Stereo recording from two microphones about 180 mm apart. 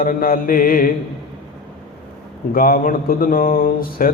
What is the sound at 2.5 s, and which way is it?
Mantra, 50° left (ahead or behind).